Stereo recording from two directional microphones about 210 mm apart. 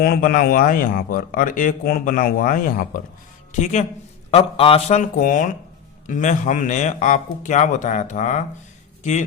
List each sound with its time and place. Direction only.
0.0 s a man's voice: 45° left (ahead or behind)